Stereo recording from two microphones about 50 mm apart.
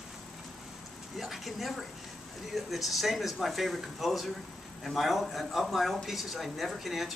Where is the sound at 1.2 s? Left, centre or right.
Centre.